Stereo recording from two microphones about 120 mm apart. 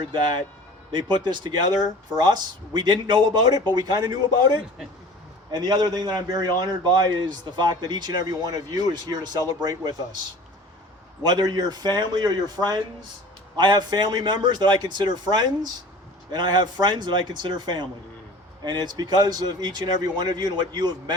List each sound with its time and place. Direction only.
0.9 s a man's voice: 40° right (ahead or behind)
11.2 s a man's voice: 35° right (ahead or behind)